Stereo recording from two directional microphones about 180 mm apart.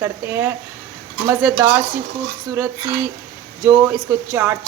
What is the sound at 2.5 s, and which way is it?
Speech, 15° right (ahead or behind).